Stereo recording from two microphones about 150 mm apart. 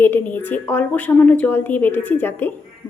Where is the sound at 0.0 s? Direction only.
10° left (ahead or behind).